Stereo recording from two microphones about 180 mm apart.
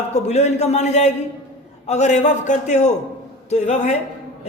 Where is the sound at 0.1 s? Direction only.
40° left (ahead or behind).